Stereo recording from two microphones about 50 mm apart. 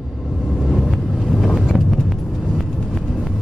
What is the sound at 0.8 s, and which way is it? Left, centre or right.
Vehicle, centre.